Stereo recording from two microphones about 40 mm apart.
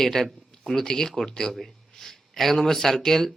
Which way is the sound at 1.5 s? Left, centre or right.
Centre.